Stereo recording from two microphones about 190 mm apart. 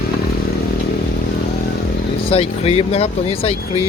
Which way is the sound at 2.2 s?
30° left (ahead or behind).